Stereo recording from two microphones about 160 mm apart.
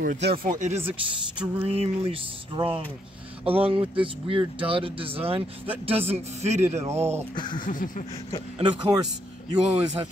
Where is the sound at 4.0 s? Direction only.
35° right (ahead or behind).